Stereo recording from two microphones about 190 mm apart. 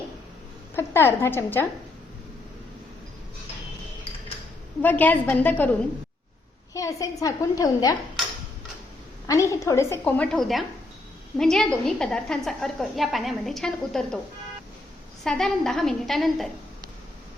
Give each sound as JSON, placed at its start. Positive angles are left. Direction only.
{"t": 0.8, "sound": "a woman's voice", "side_deg": 10}
{"t": 4.8, "sound": "a woman's voice", "side_deg": 10}
{"t": 6.7, "sound": "a woman's voice", "side_deg": 15}
{"t": 9.2, "sound": "a woman's voice", "side_deg": 15}
{"t": 15.2, "sound": "a woman's voice", "side_deg": 5}